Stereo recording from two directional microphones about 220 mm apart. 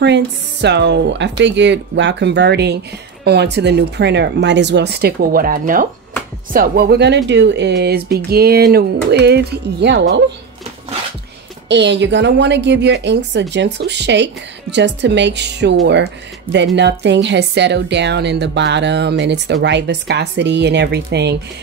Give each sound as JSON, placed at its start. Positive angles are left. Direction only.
{"t": 0.0, "sound": "a woman's voice", "side_deg": -50}
{"t": 11.7, "sound": "a woman's voice", "side_deg": -55}